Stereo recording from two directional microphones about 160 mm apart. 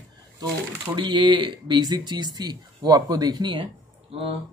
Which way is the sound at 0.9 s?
30° right (ahead or behind).